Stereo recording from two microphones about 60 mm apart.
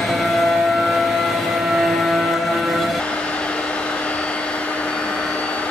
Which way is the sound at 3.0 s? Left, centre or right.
Centre.